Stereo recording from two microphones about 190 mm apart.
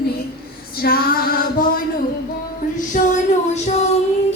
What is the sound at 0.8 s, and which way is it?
Female singing, 50° left (ahead or behind).